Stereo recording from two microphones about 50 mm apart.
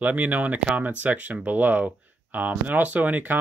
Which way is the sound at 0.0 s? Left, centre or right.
Right.